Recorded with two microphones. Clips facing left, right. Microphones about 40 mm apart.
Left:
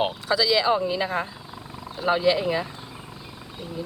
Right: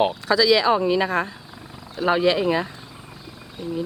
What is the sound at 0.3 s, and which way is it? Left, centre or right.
Speech, right.